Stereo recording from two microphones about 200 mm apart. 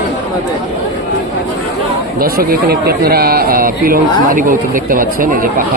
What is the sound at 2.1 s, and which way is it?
Speech, 50° right (ahead or behind).